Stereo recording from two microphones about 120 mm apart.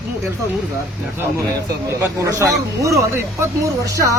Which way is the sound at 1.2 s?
25° right (ahead or behind).